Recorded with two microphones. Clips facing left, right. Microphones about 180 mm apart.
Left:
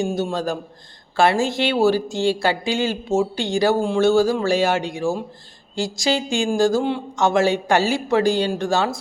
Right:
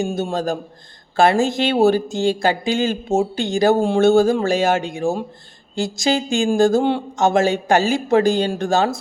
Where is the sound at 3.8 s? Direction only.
60° right (ahead or behind).